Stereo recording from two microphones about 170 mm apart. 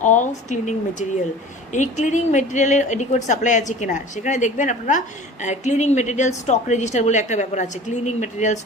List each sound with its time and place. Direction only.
0.0 s a woman's voice: 45° left (ahead or behind)